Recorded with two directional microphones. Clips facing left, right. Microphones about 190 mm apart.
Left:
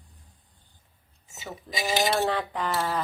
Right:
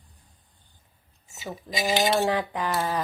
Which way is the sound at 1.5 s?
20° right (ahead or behind).